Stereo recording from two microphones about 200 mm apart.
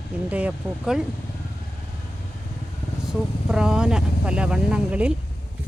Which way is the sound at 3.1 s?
5° right (ahead or behind).